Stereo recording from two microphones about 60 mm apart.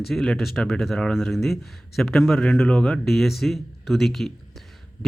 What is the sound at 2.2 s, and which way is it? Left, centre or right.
Speech, centre.